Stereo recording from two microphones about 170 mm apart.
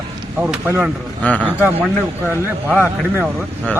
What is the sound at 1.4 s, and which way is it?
Speech, 10° right (ahead or behind).